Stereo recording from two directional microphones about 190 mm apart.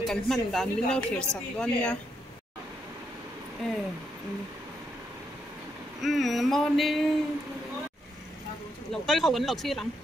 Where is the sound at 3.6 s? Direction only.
Centre (ahead or behind).